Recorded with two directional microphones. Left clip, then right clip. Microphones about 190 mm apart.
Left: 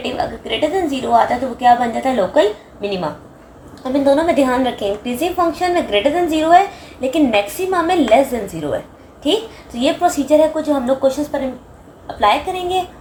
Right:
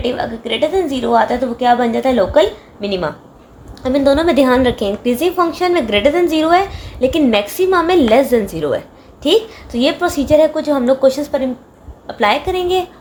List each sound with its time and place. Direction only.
0.0 s a woman's voice: 50° right (ahead or behind)
4.0 s a woman's voice: 60° right (ahead or behind)